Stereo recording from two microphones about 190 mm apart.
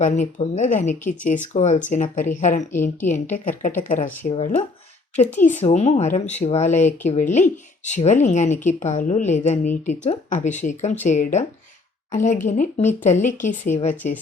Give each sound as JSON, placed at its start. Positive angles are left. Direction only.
{"t": 0.5, "sound": "a woman's voice", "side_deg": 40}
{"t": 4.3, "sound": "a woman's voice", "side_deg": 30}